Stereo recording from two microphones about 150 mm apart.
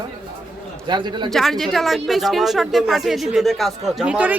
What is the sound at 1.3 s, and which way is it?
A man's voice, centre (ahead or behind).